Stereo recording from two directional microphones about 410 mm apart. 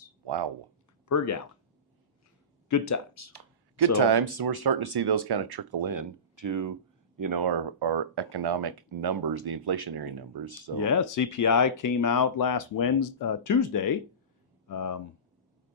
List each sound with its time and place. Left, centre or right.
0.3 s speech: right
1.0 s speech: left
2.6 s speech: left
3.9 s speech: right
10.8 s speech: left